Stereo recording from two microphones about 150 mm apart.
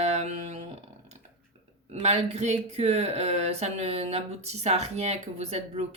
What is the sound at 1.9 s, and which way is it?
Speech, 50° right (ahead or behind).